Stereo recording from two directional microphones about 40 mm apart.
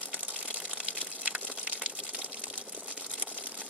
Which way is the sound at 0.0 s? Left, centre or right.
Right.